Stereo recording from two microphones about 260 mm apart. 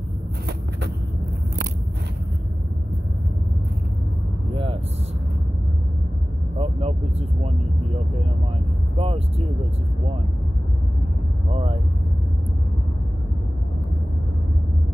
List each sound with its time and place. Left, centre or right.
0.5 s vehicle: right
6.6 s vehicle: right
8.9 s vehicle: right